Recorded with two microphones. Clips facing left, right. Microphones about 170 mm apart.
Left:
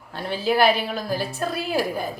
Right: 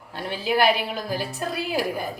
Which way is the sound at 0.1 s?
15° right (ahead or behind).